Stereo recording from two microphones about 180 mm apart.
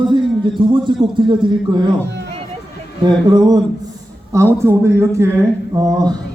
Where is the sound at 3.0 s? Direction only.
20° right (ahead or behind).